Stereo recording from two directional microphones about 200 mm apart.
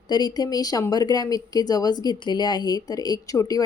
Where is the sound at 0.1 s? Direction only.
20° left (ahead or behind).